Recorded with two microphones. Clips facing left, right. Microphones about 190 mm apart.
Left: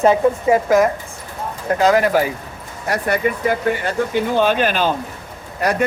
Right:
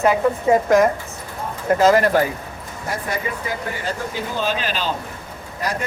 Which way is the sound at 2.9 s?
65° left (ahead or behind).